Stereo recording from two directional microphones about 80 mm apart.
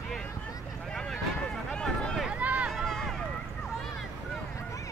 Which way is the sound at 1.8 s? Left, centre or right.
Centre.